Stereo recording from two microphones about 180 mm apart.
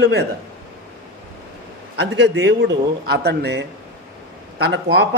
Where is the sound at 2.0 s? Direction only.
80° right.